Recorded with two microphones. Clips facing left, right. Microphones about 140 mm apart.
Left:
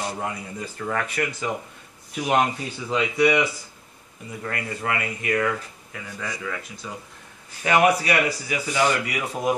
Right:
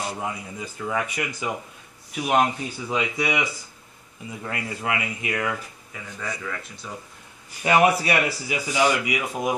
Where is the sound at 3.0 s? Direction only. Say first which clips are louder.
Left 6 dB; 15° right (ahead or behind).